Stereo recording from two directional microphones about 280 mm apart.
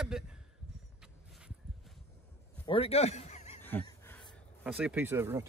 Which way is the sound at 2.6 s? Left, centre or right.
Centre.